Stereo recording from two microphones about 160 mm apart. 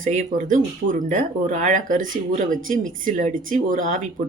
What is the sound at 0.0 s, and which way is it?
Speech, 50° right (ahead or behind).